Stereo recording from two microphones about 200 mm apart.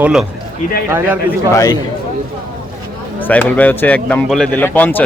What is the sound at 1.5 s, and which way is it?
Speech, 15° left (ahead or behind).